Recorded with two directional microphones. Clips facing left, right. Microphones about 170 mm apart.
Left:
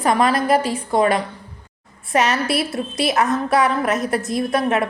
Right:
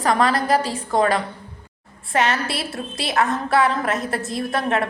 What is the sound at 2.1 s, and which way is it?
A woman's voice, 20° left (ahead or behind).